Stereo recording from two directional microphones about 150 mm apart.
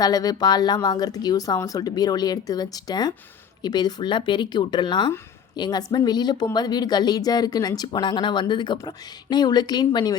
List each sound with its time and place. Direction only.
0.0 s speech: 25° left (ahead or behind)